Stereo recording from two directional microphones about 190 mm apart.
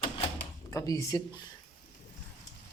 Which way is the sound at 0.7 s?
15° left (ahead or behind).